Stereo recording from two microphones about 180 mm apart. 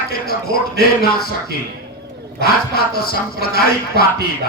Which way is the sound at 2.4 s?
55° left (ahead or behind).